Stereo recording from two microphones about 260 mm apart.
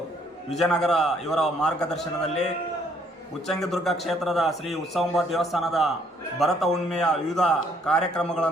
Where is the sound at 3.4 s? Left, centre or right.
Centre.